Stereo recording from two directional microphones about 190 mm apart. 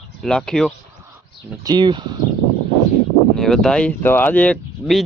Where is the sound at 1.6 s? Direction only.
20° right (ahead or behind).